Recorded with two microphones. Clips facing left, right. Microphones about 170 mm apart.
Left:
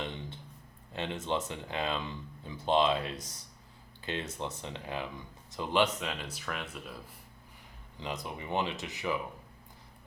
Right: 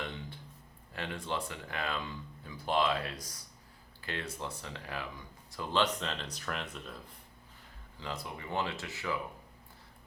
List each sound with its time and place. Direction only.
0.9 s speech: 20° left (ahead or behind); by 6.9 s 5° left (ahead or behind)
7.9 s speech: 20° left (ahead or behind)